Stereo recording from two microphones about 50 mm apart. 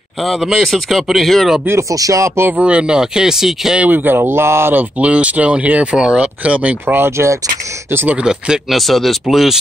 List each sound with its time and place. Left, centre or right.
0.2 s speech: centre
1.8 s speech: right
2.5 s speech: right
3.9 s speech: right
4.2 s speech: right
4.7 s speech: right
7.2 s speech: right
8.3 s speech: centre
8.7 s speech: centre